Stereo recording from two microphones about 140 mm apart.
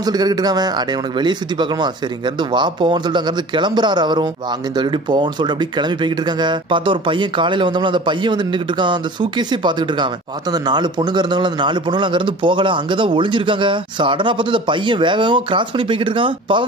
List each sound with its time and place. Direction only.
0.0 s speech: 30° right (ahead or behind)